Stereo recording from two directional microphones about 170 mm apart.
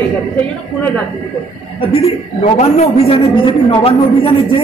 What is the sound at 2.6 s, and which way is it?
A man's voice, 35° left (ahead or behind).